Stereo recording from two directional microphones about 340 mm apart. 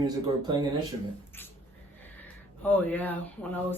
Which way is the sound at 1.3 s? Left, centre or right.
Centre.